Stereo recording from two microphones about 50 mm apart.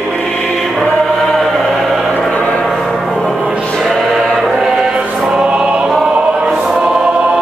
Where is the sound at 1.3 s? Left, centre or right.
Centre.